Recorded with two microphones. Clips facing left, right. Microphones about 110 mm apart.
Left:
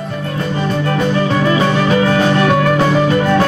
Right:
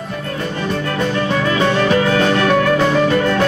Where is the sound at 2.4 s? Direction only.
10° left (ahead or behind).